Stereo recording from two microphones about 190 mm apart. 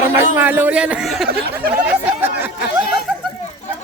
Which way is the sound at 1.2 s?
55° right (ahead or behind).